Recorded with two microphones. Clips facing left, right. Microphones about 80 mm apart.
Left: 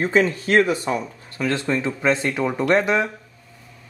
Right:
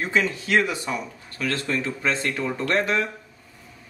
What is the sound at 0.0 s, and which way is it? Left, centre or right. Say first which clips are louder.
Speech: left 5 dB; left.